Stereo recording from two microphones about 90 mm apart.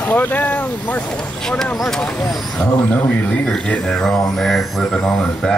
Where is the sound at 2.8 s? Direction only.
15° left (ahead or behind).